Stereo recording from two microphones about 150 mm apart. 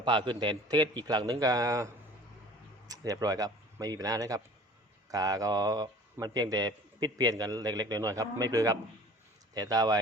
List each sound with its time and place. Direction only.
0.0 s a man's voice: 30° right (ahead or behind)